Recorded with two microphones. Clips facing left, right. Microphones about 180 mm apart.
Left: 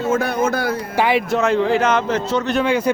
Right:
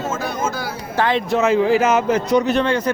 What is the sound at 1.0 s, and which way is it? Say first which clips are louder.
Speech: even; 10° left (ahead or behind).